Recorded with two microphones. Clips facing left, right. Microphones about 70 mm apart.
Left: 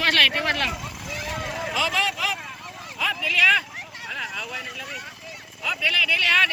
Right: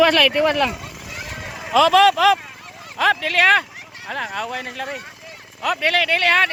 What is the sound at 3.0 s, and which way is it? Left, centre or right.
Speech, right.